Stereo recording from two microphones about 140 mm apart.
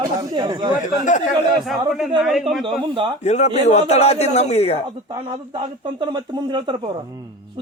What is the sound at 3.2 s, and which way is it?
Speech, 55° left (ahead or behind).